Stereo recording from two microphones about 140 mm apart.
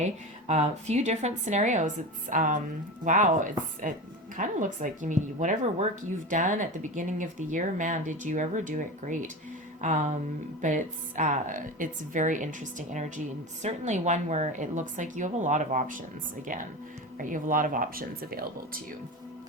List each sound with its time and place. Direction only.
0.0 s a woman's voice: 50° right (ahead or behind)
17.2 s speech: 70° right (ahead or behind); by 18.8 s 90° right